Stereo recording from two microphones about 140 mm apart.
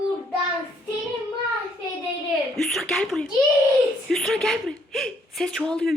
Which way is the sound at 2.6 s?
Centre (ahead or behind).